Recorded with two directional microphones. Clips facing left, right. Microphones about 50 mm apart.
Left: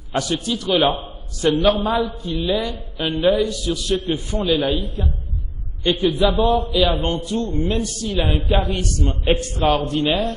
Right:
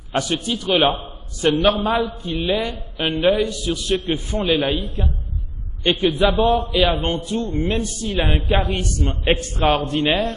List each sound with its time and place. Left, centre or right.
0.2 s a man's voice: right